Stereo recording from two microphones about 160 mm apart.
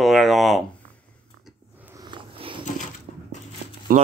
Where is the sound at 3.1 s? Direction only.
65° right (ahead or behind).